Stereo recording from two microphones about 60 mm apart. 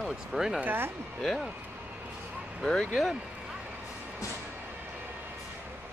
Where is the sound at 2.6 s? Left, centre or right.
Centre.